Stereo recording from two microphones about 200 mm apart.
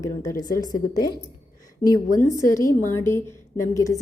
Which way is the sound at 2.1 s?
15° left (ahead or behind).